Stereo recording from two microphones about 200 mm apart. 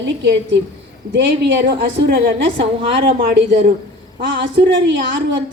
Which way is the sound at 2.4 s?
25° right (ahead or behind).